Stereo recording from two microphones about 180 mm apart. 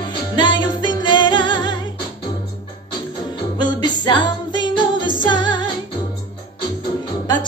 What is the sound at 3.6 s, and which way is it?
Music, 25° left (ahead or behind).